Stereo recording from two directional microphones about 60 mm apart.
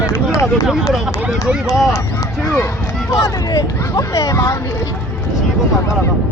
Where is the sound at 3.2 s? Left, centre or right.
Left.